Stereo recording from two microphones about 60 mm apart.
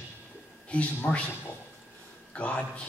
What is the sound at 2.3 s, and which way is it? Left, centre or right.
Speech, left.